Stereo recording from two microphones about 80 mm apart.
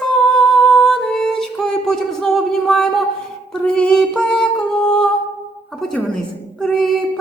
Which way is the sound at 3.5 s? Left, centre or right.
Centre.